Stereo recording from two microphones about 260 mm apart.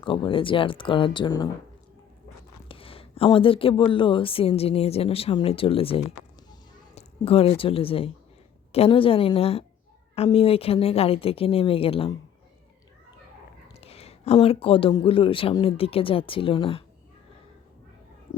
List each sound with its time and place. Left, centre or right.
0.0 s speech: centre
2.6 s speech: left
13.8 s speech: left